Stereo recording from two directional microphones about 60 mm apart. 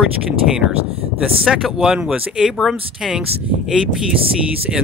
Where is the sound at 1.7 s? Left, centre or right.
Centre.